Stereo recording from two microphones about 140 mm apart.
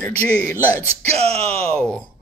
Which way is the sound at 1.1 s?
45° right (ahead or behind).